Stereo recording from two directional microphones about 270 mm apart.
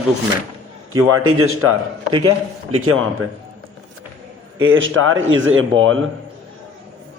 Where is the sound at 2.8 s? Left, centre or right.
Right.